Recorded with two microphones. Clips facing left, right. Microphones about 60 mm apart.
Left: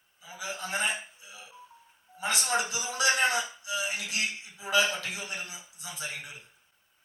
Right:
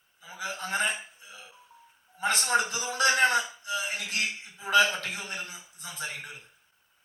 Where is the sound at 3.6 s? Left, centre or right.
Right.